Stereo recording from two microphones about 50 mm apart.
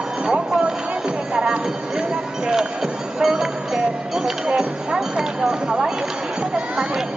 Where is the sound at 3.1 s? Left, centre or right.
Centre.